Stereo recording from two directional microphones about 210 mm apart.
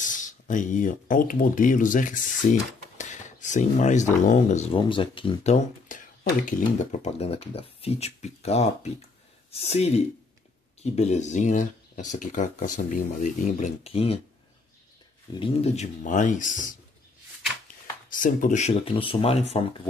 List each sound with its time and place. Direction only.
0.0 s speech: 40° left (ahead or behind)
15.3 s speech: 25° left (ahead or behind)
18.2 s speech: 40° left (ahead or behind)